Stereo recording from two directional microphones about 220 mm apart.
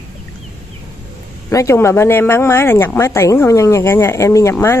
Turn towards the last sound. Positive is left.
turn(degrees=10)  # may be behind; listen again after turning